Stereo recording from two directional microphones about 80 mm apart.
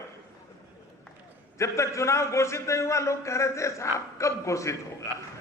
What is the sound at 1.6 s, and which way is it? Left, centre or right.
A man's voice, left.